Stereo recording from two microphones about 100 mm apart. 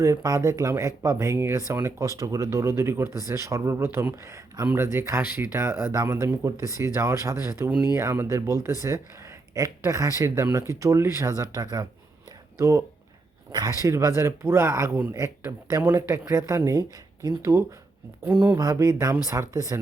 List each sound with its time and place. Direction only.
0.0 s speech: 35° right (ahead or behind)
18.3 s speech: 10° right (ahead or behind)
18.5 s speech: 35° right (ahead or behind)